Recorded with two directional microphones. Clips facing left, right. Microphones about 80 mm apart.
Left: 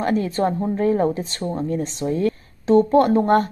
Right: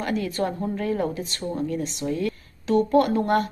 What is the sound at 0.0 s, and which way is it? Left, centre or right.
Speech, left.